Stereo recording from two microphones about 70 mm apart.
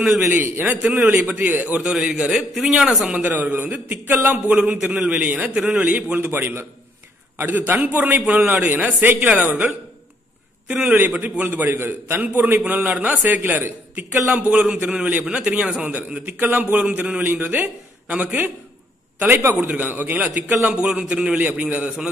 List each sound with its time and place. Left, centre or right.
0.3 s a man's voice: right
1.9 s a man's voice: centre
3.2 s a man's voice: right
10.7 s a man's voice: centre
11.0 s a man's voice: right
19.5 s a man's voice: right
20.7 s a man's voice: centre
21.4 s a man's voice: right